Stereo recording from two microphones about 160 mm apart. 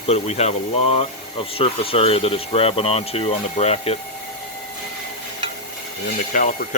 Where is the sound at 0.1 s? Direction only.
40° left (ahead or behind).